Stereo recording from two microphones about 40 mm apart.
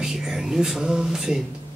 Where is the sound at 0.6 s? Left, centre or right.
Centre.